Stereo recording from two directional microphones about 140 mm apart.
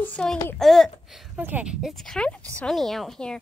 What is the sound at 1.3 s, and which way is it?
Speech, 10° right (ahead or behind).